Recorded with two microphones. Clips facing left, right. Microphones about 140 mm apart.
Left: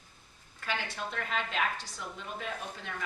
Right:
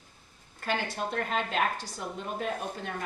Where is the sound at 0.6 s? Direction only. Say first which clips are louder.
Right 5 dB; 45° right (ahead or behind).